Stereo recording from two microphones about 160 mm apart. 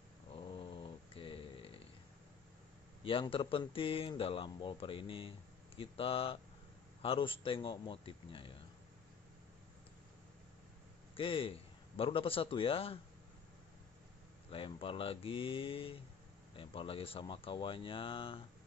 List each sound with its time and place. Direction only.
0.3 s dog: 35° left (ahead or behind)
3.0 s speech: 35° left (ahead or behind)
11.1 s speech: 35° left (ahead or behind)
14.5 s speech: 35° left (ahead or behind)